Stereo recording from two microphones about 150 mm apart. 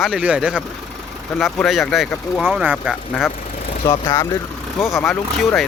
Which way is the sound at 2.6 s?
10° right (ahead or behind).